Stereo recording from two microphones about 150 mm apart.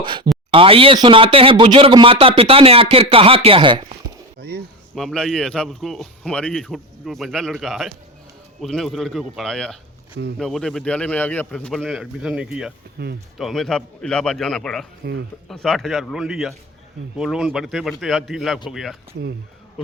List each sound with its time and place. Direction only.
0.0 s speech: 30° right (ahead or behind)
4.4 s a sound: 90° right
4.9 s a man's voice: centre (ahead or behind)